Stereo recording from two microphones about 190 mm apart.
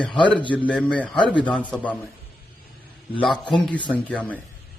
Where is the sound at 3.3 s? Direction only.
5° left (ahead or behind).